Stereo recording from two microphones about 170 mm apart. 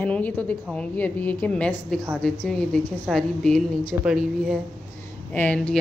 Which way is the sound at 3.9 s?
10° right (ahead or behind).